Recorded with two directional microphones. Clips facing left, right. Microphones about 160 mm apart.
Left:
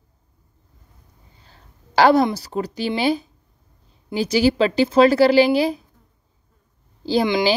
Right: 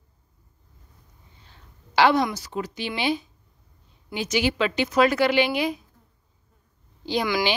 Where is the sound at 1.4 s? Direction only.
40° left (ahead or behind).